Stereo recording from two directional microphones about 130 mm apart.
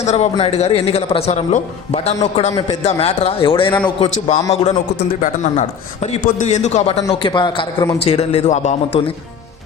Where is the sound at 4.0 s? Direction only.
60° left (ahead or behind).